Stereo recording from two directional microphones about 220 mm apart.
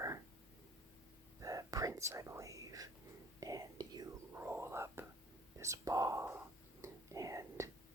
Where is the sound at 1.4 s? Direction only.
15° right (ahead or behind).